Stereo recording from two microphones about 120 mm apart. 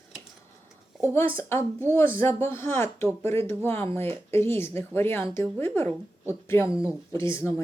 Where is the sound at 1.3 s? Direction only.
20° left (ahead or behind).